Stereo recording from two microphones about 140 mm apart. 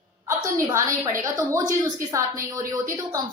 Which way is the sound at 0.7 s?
20° right (ahead or behind).